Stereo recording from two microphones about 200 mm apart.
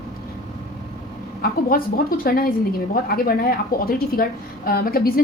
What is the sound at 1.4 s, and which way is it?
A woman's voice, 45° left (ahead or behind).